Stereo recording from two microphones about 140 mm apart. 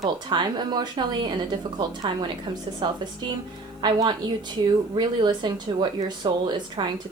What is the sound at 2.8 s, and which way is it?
Speech, 35° right (ahead or behind).